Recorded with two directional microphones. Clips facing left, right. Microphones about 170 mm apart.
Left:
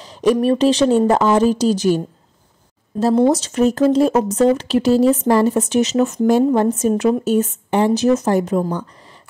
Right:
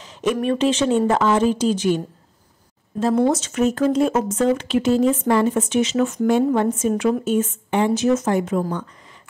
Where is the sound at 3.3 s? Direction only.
35° left (ahead or behind).